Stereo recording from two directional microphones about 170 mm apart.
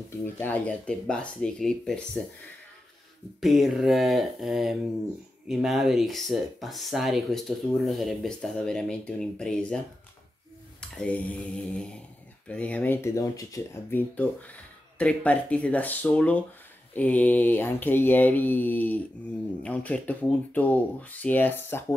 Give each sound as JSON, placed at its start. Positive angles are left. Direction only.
{"t": 0.1, "sound": "speech", "side_deg": 10}
{"t": 3.3, "sound": "speech", "side_deg": 0}
{"t": 10.8, "sound": "speech", "side_deg": 5}